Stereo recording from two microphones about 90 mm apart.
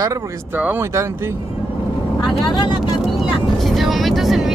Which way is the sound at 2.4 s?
45° left (ahead or behind).